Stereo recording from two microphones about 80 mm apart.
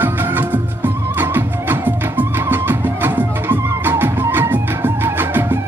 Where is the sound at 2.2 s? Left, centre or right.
Right.